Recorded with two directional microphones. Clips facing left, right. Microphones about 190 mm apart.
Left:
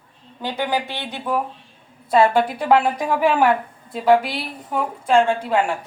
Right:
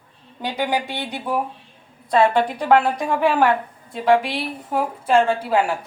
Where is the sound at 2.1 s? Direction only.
5° left (ahead or behind).